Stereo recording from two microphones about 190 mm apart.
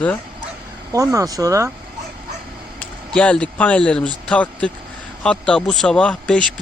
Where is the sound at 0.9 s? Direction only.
15° right (ahead or behind).